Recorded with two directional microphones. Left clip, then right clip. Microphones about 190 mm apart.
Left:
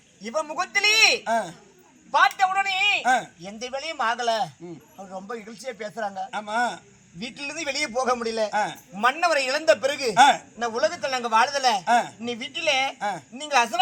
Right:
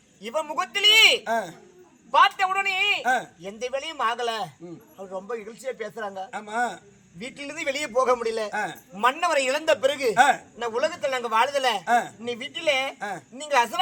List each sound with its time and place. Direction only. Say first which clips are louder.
0.3 s a man's voice: even; 25° right (ahead or behind)
1.2 s a man's voice: left 2 dB; 10° right (ahead or behind)